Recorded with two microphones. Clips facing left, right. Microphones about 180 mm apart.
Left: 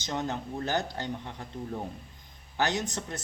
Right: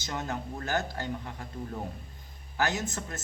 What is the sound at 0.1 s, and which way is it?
Speech, 20° left (ahead or behind).